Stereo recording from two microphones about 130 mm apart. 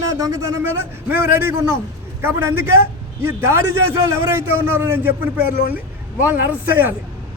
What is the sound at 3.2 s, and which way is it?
A man's voice, 20° right (ahead or behind).